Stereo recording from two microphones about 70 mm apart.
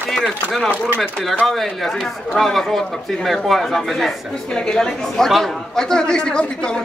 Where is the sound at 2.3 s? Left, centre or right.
Centre.